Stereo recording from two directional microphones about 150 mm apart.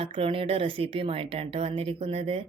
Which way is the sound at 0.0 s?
40° right (ahead or behind).